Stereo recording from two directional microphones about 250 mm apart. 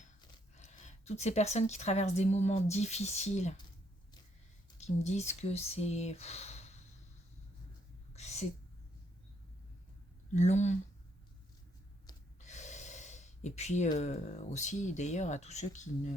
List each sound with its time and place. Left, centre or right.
0.2 s speech: left
4.8 s speech: left
8.1 s a sound: left
10.3 s speech: left
12.4 s speech: left